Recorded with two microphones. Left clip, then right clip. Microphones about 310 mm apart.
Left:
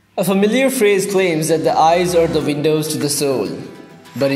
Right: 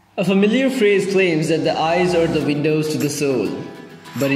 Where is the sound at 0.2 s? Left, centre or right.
Centre.